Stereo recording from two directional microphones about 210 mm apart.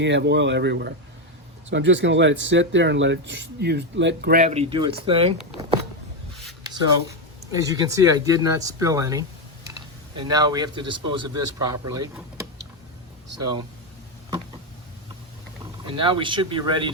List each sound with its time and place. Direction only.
0.0 s speech: 55° right (ahead or behind)
4.5 s speech: 25° right (ahead or behind)
7.5 s speech: 15° right (ahead or behind)
15.9 s speech: 25° right (ahead or behind)